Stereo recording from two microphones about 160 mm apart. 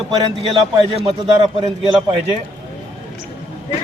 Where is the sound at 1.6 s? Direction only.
35° right (ahead or behind).